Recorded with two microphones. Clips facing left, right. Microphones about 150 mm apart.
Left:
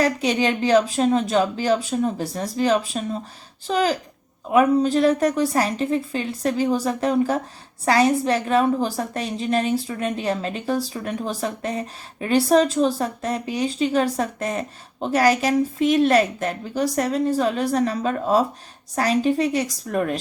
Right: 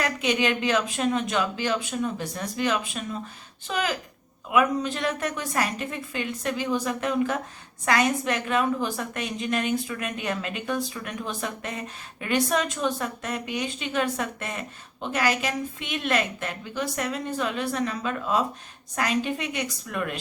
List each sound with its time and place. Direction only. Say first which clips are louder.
0.0 s a woman's voice: left 5 dB; 35° left (ahead or behind)